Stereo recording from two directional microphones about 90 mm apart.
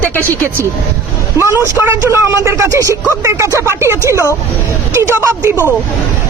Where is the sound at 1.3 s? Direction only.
30° right (ahead or behind).